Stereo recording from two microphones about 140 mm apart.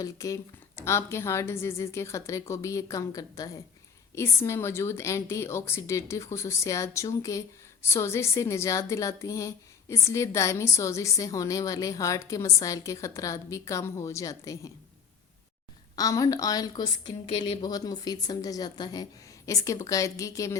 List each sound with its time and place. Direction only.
0.0 s a woman's voice: 25° left (ahead or behind)
16.0 s a woman's voice: 25° left (ahead or behind)
17.2 s speech: 45° left (ahead or behind)
17.6 s a woman's voice: 30° left (ahead or behind)